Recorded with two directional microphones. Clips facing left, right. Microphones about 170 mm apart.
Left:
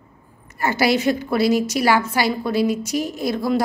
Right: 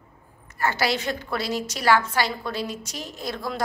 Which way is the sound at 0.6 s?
10° left (ahead or behind).